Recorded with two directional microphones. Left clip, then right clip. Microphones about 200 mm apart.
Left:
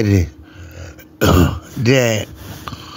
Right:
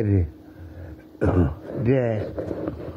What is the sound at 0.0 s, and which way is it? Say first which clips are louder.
Speech: left 7 dB; 45° left (ahead or behind).